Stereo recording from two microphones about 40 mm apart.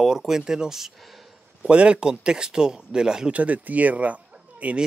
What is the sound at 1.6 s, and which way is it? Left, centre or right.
Speech, right.